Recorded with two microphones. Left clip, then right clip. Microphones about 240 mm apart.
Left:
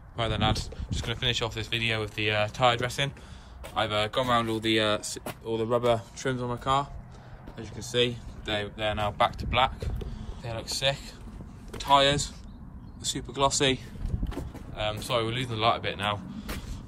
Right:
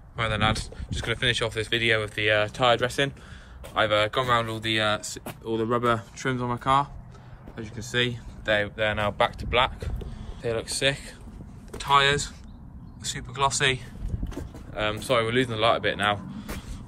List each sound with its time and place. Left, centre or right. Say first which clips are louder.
0.2 s speech: right 3 dB; centre; by 3.1 s left
3.7 s speech: right 4 dB; centre
11.7 s speech: right 1 dB; centre
14.8 s speech: right 4 dB; centre